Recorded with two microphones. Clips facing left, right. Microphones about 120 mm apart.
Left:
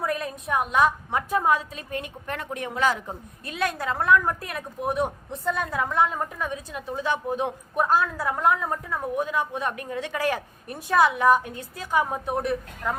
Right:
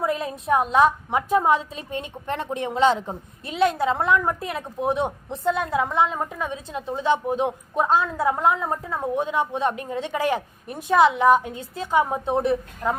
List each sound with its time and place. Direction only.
0.0 s a woman's voice: 25° right (ahead or behind)